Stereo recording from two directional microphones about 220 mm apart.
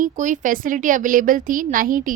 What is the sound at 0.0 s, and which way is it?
A woman's voice, 35° right (ahead or behind).